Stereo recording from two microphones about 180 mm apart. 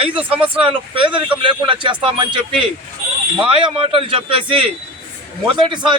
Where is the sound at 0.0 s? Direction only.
30° right (ahead or behind).